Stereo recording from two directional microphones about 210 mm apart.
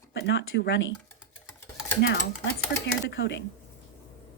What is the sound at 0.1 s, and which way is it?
Speech, 55° left (ahead or behind).